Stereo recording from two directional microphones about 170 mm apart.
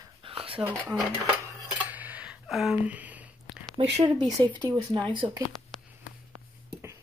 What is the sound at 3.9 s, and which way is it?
Speech, 30° right (ahead or behind).